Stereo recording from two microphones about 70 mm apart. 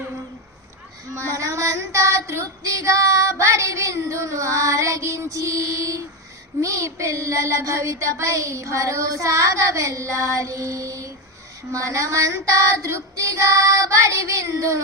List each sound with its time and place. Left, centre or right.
1.1 s child singing: right